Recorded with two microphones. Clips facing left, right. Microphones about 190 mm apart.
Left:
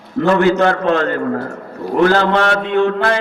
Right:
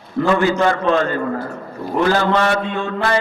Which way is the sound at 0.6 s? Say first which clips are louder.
Left 2 dB; 60° left (ahead or behind).